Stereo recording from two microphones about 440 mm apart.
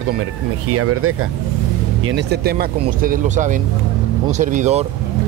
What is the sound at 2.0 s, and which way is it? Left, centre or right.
Speech, right.